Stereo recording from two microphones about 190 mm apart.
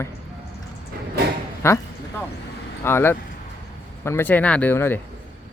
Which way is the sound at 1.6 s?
15° left (ahead or behind).